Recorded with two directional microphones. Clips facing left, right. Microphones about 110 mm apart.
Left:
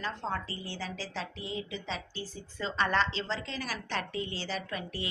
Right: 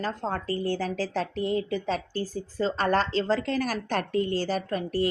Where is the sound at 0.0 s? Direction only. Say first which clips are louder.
Right 5 dB; 45° right (ahead or behind).